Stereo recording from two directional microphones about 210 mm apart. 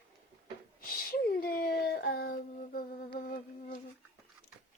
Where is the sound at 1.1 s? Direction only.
45° left (ahead or behind).